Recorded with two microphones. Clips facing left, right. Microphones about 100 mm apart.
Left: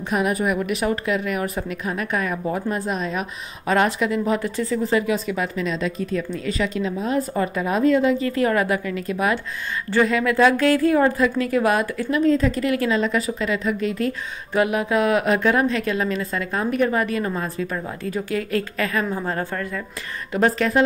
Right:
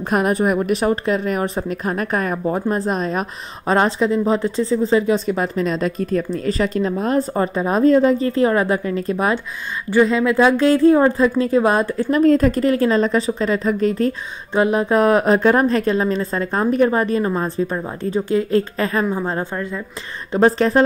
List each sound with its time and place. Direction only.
0.3 s a woman's voice: 35° right (ahead or behind)
7.2 s a woman's voice: 30° right (ahead or behind)
8.3 s a woman's voice: 30° right (ahead or behind)
9.8 s a woman's voice: 15° right (ahead or behind); by 12.1 s 30° right (ahead or behind)
12.1 s a woman's voice: 45° right (ahead or behind); by 19.0 s 30° right (ahead or behind)
19.0 s a woman's voice: 20° right (ahead or behind)
20.3 s a woman's voice: 30° right (ahead or behind)